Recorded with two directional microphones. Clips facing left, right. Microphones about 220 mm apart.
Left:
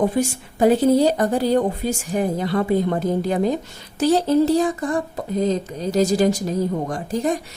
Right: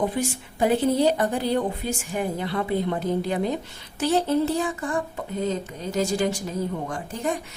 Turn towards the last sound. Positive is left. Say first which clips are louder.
# left 6 dB
turn(degrees=35)  # may be behind; listen again after turning